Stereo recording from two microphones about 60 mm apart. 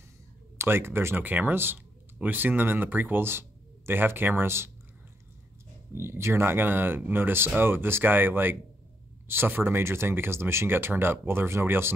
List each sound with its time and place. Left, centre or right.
0.6 s speech: right
5.9 s speech: right